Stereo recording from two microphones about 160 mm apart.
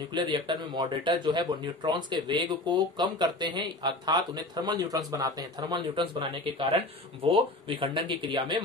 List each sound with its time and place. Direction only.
0.1 s speech: 30° right (ahead or behind)